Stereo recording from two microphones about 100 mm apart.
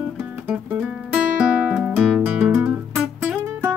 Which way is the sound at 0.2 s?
15° right (ahead or behind).